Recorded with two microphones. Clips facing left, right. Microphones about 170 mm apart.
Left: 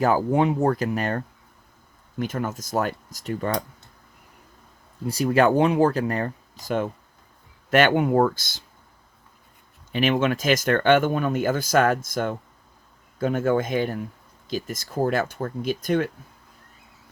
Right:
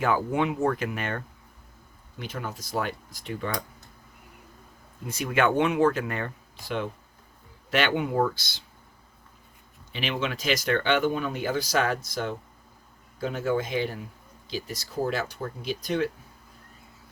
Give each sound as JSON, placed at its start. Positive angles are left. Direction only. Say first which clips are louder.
{"t": 0.0, "sound": "speech", "louder": "left 5 dB", "side_deg": 40}
{"t": 5.0, "sound": "speech", "louder": "left 5 dB", "side_deg": 35}
{"t": 9.9, "sound": "speech", "louder": "left 8 dB", "side_deg": 50}